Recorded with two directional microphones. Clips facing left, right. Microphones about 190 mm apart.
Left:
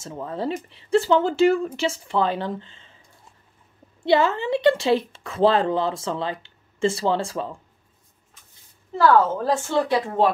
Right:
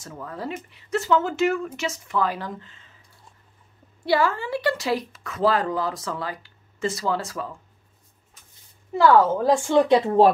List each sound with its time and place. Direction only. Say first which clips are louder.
0.0 s speech: left 5 dB; 25° left (ahead or behind)
4.0 s speech: left 3 dB; 20° left (ahead or behind)
8.9 s a woman's voice: right 1 dB; 10° right (ahead or behind)